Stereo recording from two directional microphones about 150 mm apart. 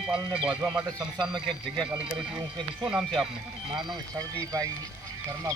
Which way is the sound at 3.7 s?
30° right (ahead or behind).